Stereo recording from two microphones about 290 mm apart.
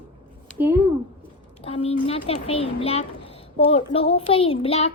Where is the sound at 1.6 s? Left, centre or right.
Centre.